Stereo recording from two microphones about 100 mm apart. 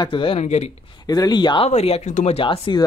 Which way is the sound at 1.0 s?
40° left (ahead or behind).